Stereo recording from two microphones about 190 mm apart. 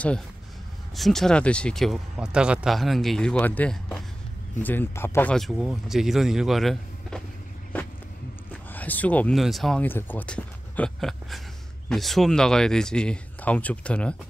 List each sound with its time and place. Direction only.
0.9 s speech: centre (ahead or behind)
8.7 s speech: 10° left (ahead or behind)